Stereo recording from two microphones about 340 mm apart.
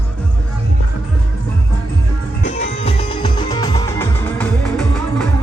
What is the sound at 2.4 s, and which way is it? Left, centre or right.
Music, left.